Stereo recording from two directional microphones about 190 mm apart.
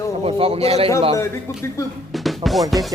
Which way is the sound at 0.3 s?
30° right (ahead or behind).